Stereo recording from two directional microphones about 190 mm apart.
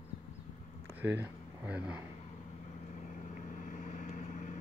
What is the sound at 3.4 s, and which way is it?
Vehicle, 40° left (ahead or behind).